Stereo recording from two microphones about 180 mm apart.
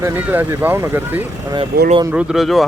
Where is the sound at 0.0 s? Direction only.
10° right (ahead or behind).